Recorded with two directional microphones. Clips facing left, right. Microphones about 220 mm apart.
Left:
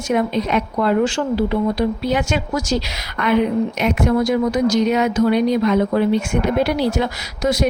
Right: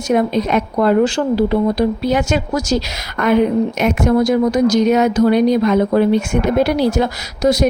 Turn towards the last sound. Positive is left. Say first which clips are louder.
# right 4 dB
turn(degrees=-40)  # may be behind; listen again after turning